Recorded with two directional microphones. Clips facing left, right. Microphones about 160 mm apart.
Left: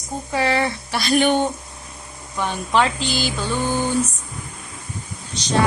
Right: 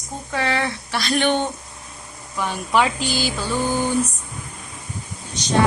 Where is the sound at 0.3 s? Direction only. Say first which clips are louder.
Left 3 dB; 5° left (ahead or behind).